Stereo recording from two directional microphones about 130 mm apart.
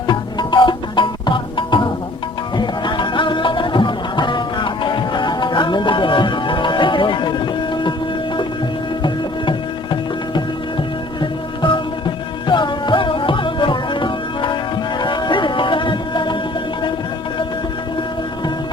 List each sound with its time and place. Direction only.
0.1 s music: 35° left (ahead or behind)
9.0 s music: 35° left (ahead or behind)